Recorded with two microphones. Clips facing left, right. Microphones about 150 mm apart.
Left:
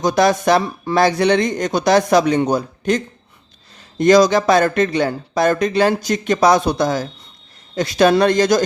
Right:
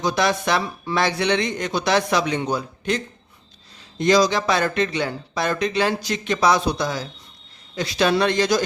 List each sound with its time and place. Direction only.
0.0 s speech: 45° left (ahead or behind)